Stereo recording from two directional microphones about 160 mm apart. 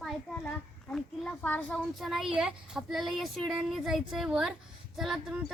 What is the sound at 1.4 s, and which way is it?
Speech, 10° left (ahead or behind).